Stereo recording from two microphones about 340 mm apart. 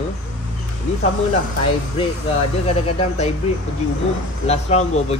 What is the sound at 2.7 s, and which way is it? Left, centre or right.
Speech, centre.